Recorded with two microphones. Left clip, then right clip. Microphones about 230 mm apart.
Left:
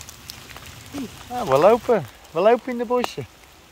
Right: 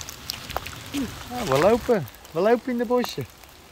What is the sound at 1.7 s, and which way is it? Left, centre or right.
Speech, centre.